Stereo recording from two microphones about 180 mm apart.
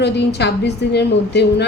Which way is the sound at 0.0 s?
70° left (ahead or behind).